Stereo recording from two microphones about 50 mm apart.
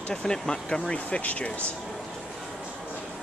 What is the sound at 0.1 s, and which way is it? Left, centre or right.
Speech, centre.